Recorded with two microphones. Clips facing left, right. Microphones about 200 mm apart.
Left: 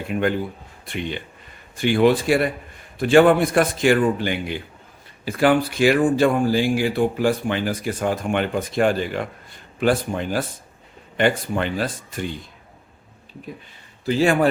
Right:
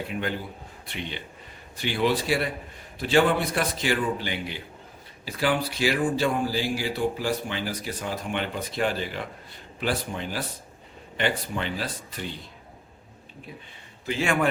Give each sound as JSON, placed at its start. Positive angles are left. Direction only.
{"t": 0.1, "sound": "speech", "side_deg": 50}
{"t": 1.7, "sound": "speech", "side_deg": 50}
{"t": 14.0, "sound": "a man's voice", "side_deg": 35}